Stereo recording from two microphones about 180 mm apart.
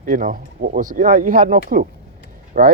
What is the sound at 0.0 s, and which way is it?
Speech, 50° right (ahead or behind).